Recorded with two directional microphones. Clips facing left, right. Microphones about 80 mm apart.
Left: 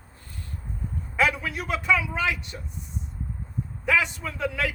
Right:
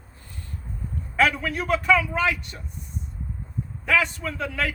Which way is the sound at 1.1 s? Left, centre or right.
Centre.